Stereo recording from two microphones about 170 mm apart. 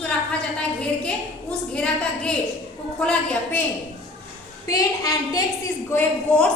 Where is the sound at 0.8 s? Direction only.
5° left (ahead or behind).